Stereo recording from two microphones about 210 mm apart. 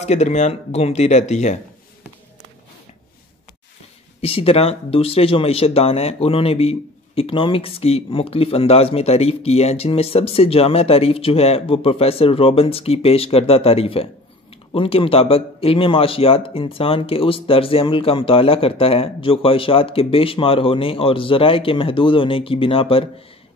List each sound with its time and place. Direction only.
0.0 s speech: 30° left (ahead or behind)
4.2 s speech: 25° left (ahead or behind)